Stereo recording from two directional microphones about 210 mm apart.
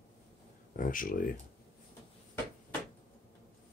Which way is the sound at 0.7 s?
40° left (ahead or behind).